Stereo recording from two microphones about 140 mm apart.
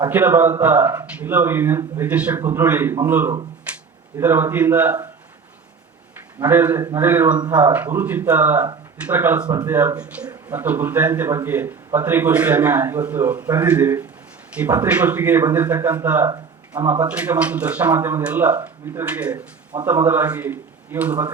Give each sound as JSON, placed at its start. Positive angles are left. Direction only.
{"t": 0.1, "sound": "a man's voice", "side_deg": -15}
{"t": 6.4, "sound": "a man's voice", "side_deg": -15}